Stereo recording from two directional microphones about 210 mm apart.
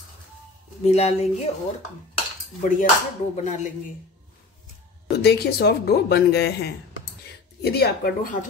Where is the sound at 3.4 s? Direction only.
35° left (ahead or behind).